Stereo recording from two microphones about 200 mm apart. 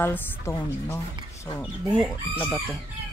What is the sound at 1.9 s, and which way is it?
Speech, 5° right (ahead or behind).